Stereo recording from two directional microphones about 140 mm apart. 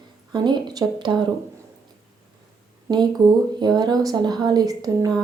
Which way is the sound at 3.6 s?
30° right (ahead or behind).